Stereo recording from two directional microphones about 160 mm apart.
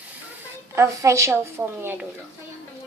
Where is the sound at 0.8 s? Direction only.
20° right (ahead or behind).